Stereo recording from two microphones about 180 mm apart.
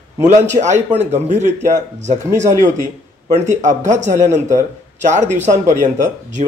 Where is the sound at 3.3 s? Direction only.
40° right (ahead or behind).